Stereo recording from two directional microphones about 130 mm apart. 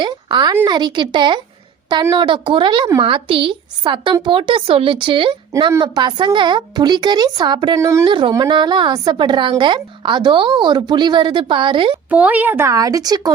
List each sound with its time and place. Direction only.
0.0 s a sound: 35° right (ahead or behind)
0.7 s a woman's voice: 35° right (ahead or behind)
12.1 s a woman's voice: 10° right (ahead or behind); by 13.3 s 30° right (ahead or behind)